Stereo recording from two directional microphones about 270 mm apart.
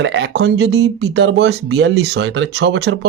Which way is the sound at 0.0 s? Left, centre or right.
Right.